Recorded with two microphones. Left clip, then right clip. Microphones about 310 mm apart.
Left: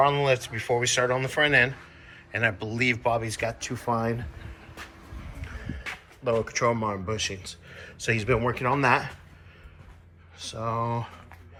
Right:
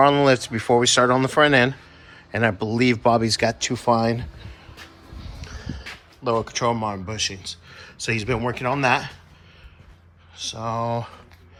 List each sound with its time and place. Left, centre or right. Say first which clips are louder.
0.0 s speech: right 6 dB; right
0.3 s speech: right 7 dB; right
5.4 s music: right 3 dB; centre
6.2 s speech: right 3 dB; centre
10.3 s speech: right 3 dB; centre